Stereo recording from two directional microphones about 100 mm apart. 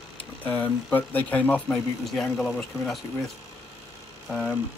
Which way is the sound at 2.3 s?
Centre (ahead or behind).